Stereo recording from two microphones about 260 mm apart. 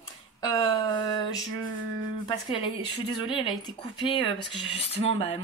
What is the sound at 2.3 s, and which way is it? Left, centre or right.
Speech, centre.